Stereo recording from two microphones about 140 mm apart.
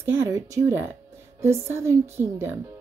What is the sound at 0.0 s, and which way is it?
A woman's voice, 15° right (ahead or behind).